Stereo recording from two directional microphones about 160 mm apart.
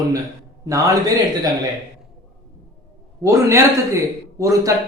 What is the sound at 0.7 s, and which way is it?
Speech, 20° right (ahead or behind).